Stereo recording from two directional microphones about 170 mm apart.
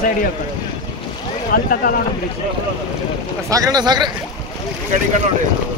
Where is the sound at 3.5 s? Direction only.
20° right (ahead or behind).